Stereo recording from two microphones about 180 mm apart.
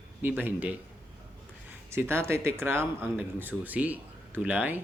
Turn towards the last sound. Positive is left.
turn(degrees=-10)  # may be behind; listen again after turning